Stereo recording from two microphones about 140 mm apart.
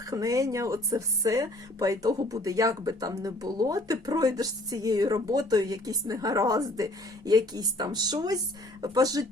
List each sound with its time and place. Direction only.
0.0 s speech: 25° right (ahead or behind)